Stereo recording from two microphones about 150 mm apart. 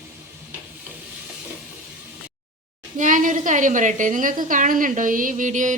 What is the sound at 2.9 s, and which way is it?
A woman's voice, 60° right (ahead or behind).